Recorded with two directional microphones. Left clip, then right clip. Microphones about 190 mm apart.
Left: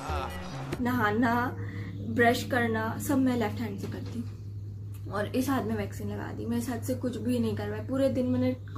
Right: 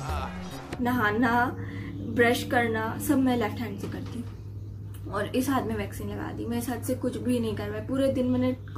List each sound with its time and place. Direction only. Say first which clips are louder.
0.0 s music: even; centre (ahead or behind)
2.1 s a woman's voice: right 2 dB; 10° left (ahead or behind)
5.1 s a woman's voice: right 2 dB; 10° left (ahead or behind)